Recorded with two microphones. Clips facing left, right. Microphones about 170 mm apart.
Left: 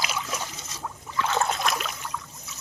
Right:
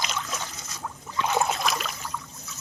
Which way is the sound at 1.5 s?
Centre (ahead or behind).